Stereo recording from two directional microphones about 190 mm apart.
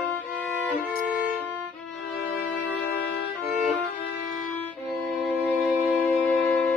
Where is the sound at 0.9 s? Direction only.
50° left (ahead or behind).